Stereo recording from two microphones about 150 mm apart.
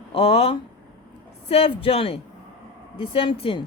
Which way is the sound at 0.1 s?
40° left (ahead or behind).